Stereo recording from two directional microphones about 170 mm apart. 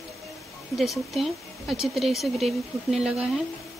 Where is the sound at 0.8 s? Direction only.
Centre (ahead or behind).